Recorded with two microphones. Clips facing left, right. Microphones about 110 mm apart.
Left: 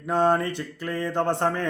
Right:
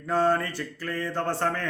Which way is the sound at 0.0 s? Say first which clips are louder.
Left 2 dB; 20° left (ahead or behind).